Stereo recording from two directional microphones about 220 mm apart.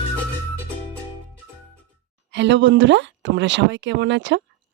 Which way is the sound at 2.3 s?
55° right (ahead or behind).